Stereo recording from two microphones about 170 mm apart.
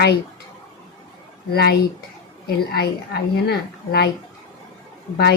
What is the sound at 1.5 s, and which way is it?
Speech, 70° left (ahead or behind).